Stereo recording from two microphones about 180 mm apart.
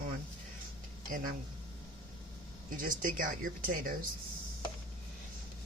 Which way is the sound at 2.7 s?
50° right (ahead or behind).